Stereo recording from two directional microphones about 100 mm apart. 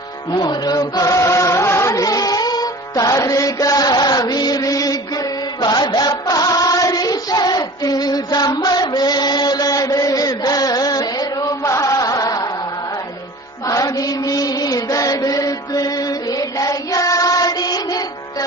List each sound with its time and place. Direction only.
0.3 s music: 40° left (ahead or behind)
13.7 s chant: 35° left (ahead or behind)